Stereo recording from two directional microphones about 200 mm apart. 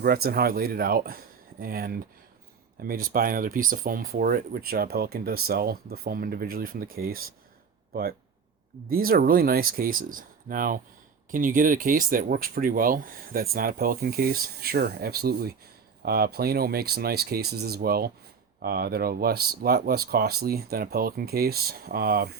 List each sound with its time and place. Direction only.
0.0 s speech: 50° right (ahead or behind)
8.9 s speech: 45° right (ahead or behind)